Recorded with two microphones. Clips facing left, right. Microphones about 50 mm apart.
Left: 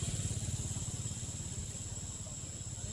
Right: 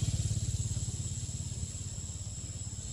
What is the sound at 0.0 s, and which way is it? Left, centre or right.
Vehicle, centre.